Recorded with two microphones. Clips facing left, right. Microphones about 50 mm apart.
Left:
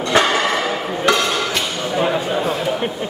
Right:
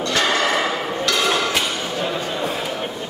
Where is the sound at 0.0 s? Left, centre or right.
Left.